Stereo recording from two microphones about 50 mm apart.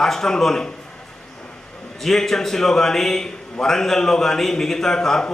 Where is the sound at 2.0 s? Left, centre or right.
Centre.